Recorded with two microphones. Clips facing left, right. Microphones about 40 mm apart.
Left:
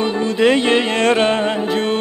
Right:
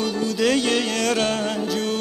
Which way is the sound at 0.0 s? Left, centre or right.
Left.